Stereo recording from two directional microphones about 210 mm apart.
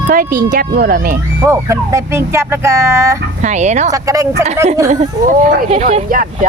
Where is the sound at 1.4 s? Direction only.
15° right (ahead or behind).